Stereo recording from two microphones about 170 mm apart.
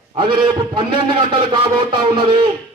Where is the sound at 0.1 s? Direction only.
30° right (ahead or behind).